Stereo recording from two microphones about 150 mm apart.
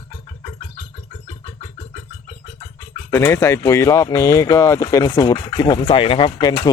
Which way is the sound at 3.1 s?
20° left (ahead or behind).